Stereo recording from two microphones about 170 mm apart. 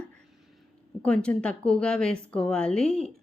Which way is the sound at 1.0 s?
5° left (ahead or behind).